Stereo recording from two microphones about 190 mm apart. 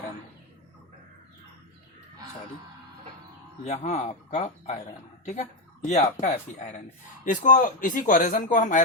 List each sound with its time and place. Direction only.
3.6 s speech: 40° left (ahead or behind)
5.8 s speech: 35° left (ahead or behind)